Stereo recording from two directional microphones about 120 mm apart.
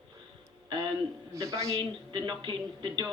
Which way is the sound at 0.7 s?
40° right (ahead or behind).